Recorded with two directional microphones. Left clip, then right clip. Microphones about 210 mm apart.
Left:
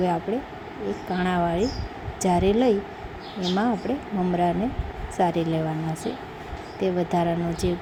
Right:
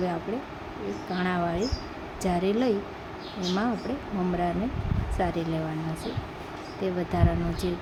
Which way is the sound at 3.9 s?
15° left (ahead or behind).